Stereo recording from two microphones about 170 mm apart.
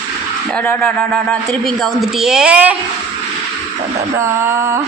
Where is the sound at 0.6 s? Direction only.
10° left (ahead or behind); by 2.8 s 5° right (ahead or behind).